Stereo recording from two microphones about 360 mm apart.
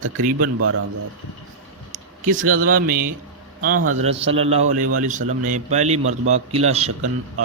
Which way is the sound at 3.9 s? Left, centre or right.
Centre.